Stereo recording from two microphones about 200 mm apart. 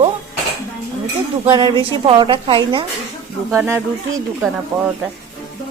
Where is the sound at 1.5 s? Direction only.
25° right (ahead or behind).